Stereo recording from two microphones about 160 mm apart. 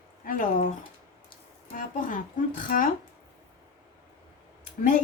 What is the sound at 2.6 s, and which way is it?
Speech, 60° left (ahead or behind).